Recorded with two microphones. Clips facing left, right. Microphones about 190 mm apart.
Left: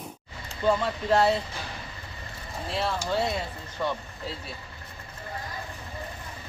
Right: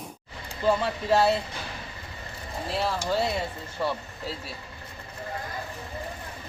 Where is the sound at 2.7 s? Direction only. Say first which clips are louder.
Right 1 dB; centre (ahead or behind).